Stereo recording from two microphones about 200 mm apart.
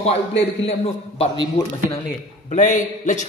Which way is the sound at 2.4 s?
40° left (ahead or behind).